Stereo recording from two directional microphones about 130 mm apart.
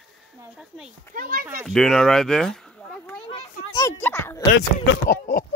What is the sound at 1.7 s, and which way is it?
Speech, 5° left (ahead or behind).